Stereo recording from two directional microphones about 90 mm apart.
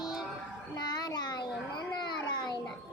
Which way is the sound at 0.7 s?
50° left (ahead or behind).